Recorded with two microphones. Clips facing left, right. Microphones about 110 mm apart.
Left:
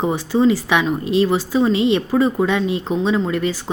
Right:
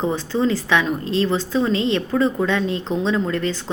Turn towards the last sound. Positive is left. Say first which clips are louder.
# left 2 dB
turn(degrees=10)  # may be behind; listen again after turning